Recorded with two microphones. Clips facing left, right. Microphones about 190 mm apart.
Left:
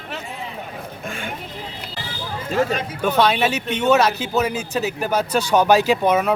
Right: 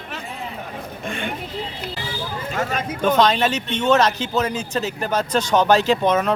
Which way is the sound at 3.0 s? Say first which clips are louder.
Right 1 dB; 10° left (ahead or behind).